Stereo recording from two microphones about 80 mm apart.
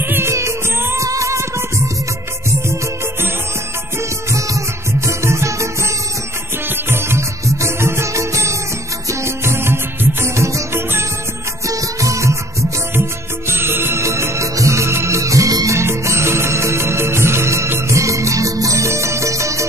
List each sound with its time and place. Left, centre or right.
0.0 s music: right
5.0 s music: right
6.9 s music: right
13.5 s music: right